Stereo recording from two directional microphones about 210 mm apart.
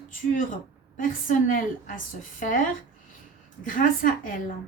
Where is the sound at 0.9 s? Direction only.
40° left (ahead or behind).